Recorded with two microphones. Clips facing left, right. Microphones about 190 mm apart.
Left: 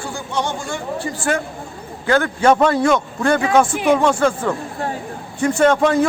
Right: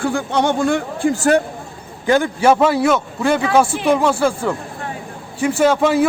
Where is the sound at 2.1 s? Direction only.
15° right (ahead or behind).